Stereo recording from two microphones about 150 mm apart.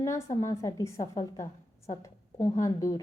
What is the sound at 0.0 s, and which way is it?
A woman's voice, 20° left (ahead or behind).